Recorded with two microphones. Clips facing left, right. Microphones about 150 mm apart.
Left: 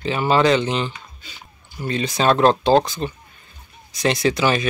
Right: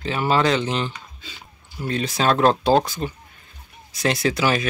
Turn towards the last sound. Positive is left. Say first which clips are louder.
# left 2 dB
turn(degrees=-5)  # may be behind; listen again after turning